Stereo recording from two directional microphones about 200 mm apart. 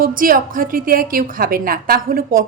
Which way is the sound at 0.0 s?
45° right (ahead or behind).